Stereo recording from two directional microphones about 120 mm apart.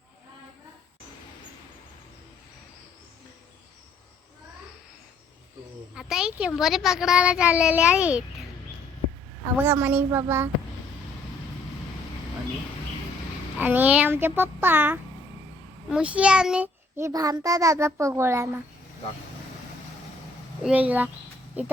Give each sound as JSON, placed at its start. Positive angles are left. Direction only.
{"t": 5.9, "sound": "a child's voice", "side_deg": -5}
{"t": 9.6, "sound": "a child's voice", "side_deg": -15}
{"t": 13.6, "sound": "a child's voice", "side_deg": -15}
{"t": 17.0, "sound": "a child's voice", "side_deg": -30}
{"t": 20.7, "sound": "a child's voice", "side_deg": -10}